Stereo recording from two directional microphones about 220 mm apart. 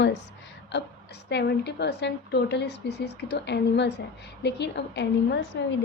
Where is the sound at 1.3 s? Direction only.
50° left (ahead or behind).